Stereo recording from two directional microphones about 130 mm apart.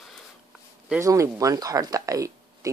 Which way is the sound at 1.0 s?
25° right (ahead or behind).